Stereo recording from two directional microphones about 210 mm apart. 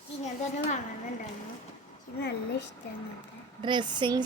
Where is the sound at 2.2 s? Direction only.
50° left (ahead or behind).